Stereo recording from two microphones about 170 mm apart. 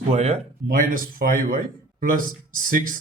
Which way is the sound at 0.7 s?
55° right (ahead or behind).